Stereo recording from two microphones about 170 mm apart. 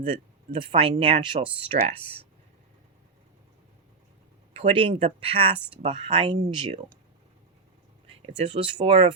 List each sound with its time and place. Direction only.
0.0 s speech: 35° right (ahead or behind)
4.5 s speech: 35° right (ahead or behind)
8.4 s speech: 35° right (ahead or behind)